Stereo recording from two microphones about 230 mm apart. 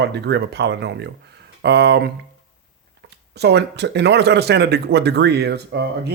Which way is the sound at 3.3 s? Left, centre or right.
Right.